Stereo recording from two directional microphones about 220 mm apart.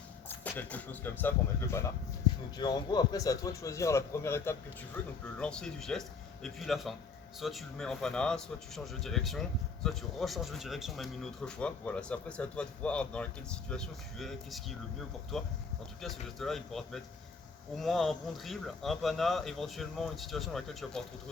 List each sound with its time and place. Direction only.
0.3 s a man's voice: 5° left (ahead or behind)